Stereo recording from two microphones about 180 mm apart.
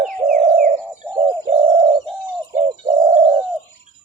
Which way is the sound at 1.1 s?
30° right (ahead or behind).